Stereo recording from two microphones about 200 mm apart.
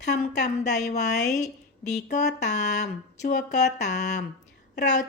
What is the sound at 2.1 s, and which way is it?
A woman's voice, 35° left (ahead or behind).